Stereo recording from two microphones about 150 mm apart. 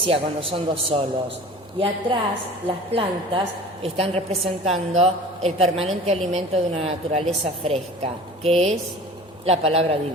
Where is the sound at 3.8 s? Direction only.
40° right (ahead or behind).